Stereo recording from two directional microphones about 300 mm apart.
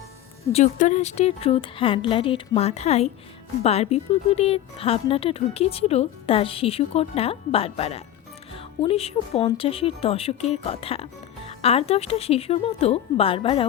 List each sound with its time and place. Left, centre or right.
0.4 s speech: left